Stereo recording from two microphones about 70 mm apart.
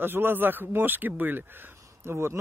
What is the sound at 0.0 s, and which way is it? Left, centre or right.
Speech, right.